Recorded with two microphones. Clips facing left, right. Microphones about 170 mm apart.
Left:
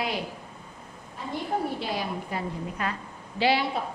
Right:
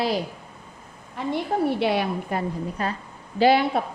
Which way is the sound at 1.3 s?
70° right (ahead or behind).